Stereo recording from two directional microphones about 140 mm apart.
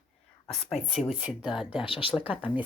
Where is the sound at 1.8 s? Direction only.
40° left (ahead or behind).